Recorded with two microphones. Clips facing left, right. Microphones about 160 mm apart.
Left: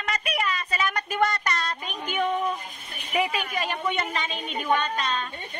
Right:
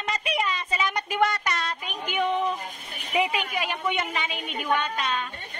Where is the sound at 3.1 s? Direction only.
15° right (ahead or behind).